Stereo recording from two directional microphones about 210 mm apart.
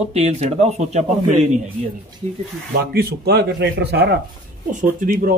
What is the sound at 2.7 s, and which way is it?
Speech, 50° right (ahead or behind).